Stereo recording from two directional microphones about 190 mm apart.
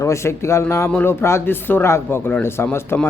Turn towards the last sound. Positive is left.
turn(degrees=10)  # may be behind; listen again after turning